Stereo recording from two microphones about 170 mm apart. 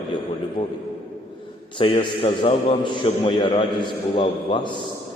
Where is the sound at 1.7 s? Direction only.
30° left (ahead or behind).